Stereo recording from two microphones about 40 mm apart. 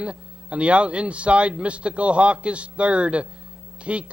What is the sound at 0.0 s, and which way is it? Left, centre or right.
A man's voice, right.